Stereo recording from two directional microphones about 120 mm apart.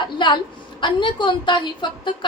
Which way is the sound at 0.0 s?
40° left (ahead or behind).